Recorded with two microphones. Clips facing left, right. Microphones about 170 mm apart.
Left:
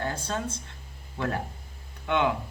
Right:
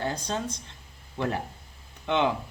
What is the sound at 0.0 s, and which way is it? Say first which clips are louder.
Speech: right 1 dB; 15° right (ahead or behind).